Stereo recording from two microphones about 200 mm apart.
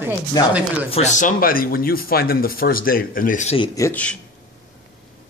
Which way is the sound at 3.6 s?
15° left (ahead or behind).